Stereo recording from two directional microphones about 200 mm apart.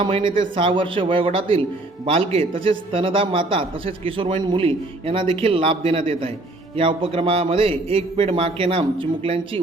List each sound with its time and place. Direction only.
0.0 s a man's voice: 25° right (ahead or behind)